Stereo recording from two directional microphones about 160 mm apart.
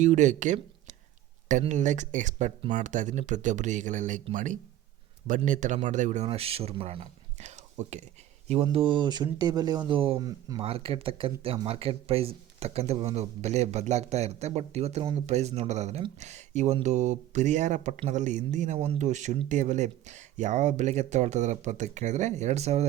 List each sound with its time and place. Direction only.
0.0 s speech: 50° right (ahead or behind)
5.5 s speech: 50° right (ahead or behind)
8.6 s speech: 30° right (ahead or behind)
9.9 s speech: 35° right (ahead or behind)
10.2 s speech: 25° right (ahead or behind)
10.6 s speech: 40° right (ahead or behind)